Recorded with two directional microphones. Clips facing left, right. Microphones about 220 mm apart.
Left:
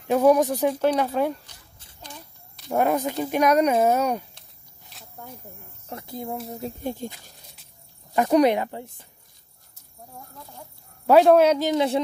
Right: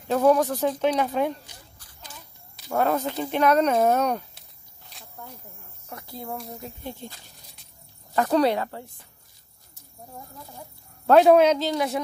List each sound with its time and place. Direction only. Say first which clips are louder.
0.1 s speech: left 2 dB; 15° left (ahead or behind)
2.7 s speech: left 2 dB; 15° left (ahead or behind)
4.9 s snake: left 1 dB; centre (ahead or behind)
5.9 s speech: left 4 dB; 25° left (ahead or behind)
6.8 s speech: left 8 dB; 45° left (ahead or behind)
8.1 s speech: left 3 dB; 15° left (ahead or behind)
11.1 s speech: even; 5° left (ahead or behind); by 12.0 s 25° left (ahead or behind)